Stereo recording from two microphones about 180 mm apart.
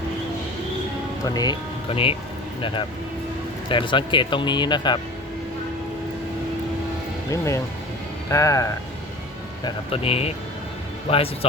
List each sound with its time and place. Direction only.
1.2 s speech: 20° left (ahead or behind)
7.3 s speech: 15° left (ahead or behind)
9.6 s speech: 30° left (ahead or behind)